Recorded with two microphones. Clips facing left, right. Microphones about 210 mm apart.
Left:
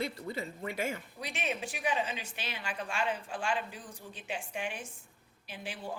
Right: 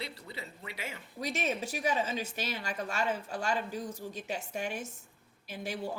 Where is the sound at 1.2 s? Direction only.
40° right (ahead or behind).